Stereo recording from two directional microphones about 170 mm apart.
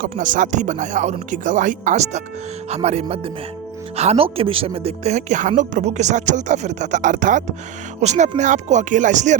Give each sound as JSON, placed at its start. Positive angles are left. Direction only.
{"t": 0.0, "sound": "speech", "side_deg": -50}